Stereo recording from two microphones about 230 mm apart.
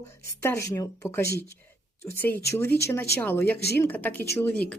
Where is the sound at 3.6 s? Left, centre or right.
Left.